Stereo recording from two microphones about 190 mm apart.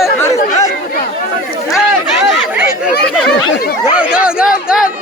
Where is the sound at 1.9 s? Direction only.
10° right (ahead or behind).